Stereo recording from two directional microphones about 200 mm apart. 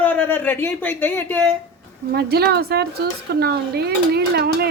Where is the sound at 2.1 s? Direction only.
50° right (ahead or behind).